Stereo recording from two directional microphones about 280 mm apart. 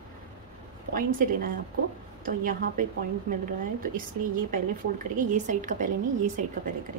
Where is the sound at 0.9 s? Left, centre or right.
Right.